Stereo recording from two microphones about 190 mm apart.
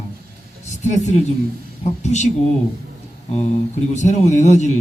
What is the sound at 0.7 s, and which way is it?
A man's voice, 40° left (ahead or behind).